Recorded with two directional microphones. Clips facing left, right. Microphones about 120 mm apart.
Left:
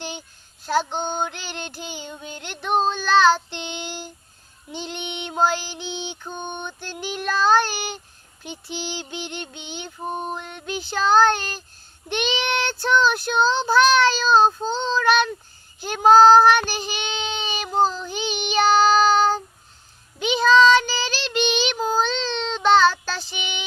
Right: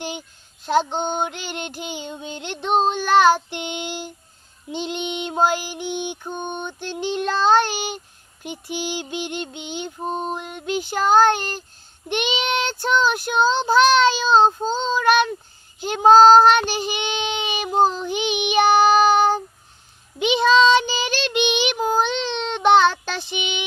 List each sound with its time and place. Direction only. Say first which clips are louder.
0.0 s child singing: right 3 dB; 15° right (ahead or behind)